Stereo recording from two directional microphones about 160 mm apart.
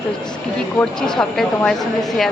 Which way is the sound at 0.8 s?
5° left (ahead or behind).